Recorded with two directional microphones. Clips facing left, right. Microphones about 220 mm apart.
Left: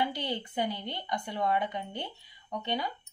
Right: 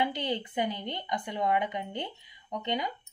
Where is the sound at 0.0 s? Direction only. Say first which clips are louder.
Right 2 dB; 20° right (ahead or behind).